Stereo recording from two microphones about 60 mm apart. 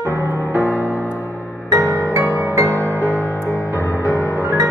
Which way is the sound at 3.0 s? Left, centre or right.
Left.